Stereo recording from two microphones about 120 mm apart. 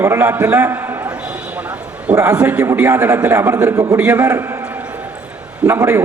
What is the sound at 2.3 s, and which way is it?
A man's voice, 10° right (ahead or behind).